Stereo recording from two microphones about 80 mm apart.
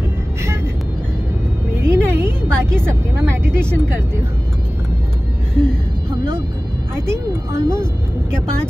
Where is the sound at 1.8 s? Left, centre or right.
Right.